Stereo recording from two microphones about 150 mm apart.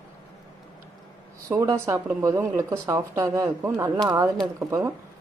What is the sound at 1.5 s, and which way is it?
Speech, 20° right (ahead or behind).